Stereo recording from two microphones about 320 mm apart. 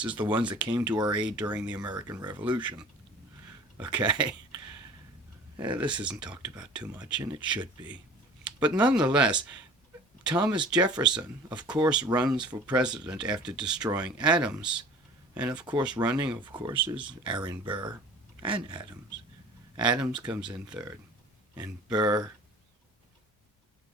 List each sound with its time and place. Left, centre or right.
0.2 s speech: centre
10.2 s speech: centre
20.0 s speech: centre